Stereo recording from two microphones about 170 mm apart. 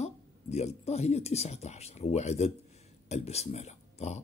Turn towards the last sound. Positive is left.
turn(degrees=40)  # may be behind; listen again after turning